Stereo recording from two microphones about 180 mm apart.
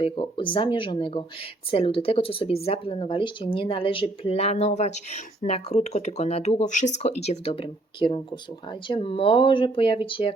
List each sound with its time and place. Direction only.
0.0 s speech: 30° left (ahead or behind)